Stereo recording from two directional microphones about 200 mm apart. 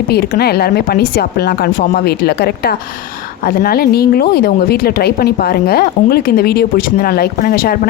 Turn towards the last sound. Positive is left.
turn(degrees=45)  # may be behind; listen again after turning